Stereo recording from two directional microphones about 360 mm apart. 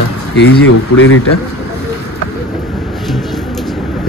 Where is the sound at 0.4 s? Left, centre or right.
Left.